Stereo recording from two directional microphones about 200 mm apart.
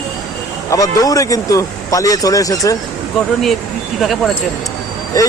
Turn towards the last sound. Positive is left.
turn(degrees=15)  # may be behind; listen again after turning